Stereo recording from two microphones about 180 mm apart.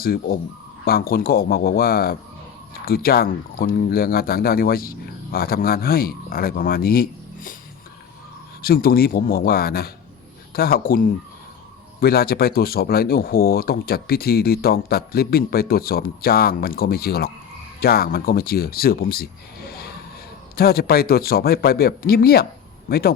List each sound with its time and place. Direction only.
0.0 s speech: 55° left (ahead or behind)
8.6 s speech: 55° left (ahead or behind)